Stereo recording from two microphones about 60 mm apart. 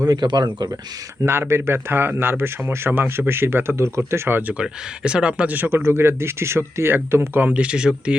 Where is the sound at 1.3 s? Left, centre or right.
Right.